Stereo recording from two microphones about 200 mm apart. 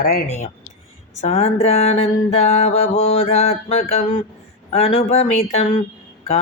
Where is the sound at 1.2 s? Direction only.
30° left (ahead or behind).